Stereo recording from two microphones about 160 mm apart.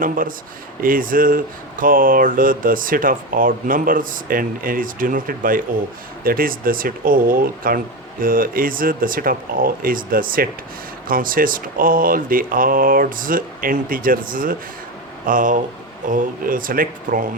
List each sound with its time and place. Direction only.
0.0 s speech: 60° right (ahead or behind)